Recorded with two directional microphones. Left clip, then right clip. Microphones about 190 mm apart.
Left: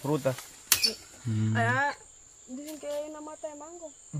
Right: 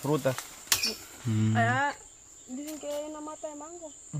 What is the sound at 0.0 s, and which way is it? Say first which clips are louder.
Speech: right 1 dB; 10° right (ahead or behind).